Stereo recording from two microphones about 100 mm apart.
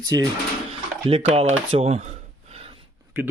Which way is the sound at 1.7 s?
90° right.